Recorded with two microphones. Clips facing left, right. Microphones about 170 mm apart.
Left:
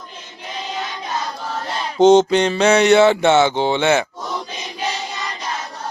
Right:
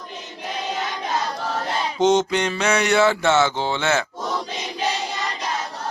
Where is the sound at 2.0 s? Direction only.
30° left (ahead or behind).